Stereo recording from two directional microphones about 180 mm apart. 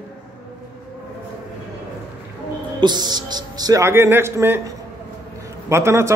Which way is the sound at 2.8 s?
25° right (ahead or behind).